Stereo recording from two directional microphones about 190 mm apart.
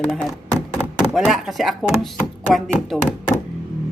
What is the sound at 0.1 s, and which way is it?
Speech, centre (ahead or behind).